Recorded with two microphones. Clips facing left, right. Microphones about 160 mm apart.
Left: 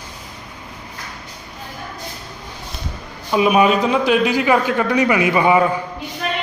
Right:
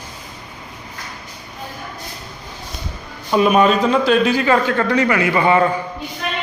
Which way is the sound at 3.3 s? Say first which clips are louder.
Right 1 dB; 5° left (ahead or behind).